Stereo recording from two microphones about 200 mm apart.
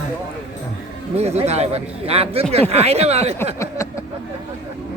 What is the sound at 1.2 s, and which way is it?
Speech, 30° right (ahead or behind).